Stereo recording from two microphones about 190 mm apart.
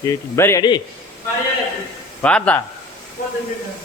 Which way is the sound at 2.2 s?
5° left (ahead or behind).